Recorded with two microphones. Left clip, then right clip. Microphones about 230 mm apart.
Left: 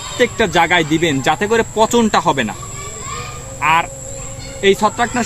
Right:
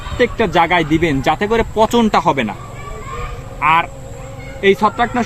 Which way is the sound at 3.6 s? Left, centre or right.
Centre.